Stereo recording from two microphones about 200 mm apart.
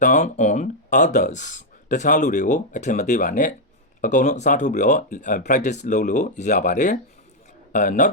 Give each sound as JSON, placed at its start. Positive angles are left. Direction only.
{"t": 0.0, "sound": "speech", "side_deg": 40}